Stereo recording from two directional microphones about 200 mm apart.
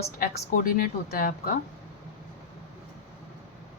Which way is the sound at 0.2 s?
45° left (ahead or behind).